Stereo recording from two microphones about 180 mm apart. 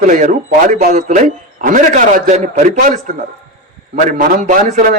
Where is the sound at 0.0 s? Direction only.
45° right (ahead or behind).